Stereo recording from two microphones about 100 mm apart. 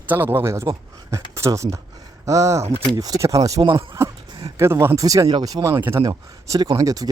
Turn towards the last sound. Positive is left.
turn(degrees=-40)  # may be behind; listen again after turning